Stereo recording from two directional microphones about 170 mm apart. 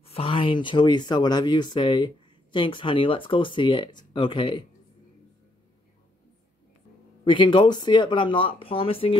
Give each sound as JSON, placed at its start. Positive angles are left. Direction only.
{"t": 0.0, "sound": "speech", "side_deg": 35}
{"t": 7.2, "sound": "speech", "side_deg": 30}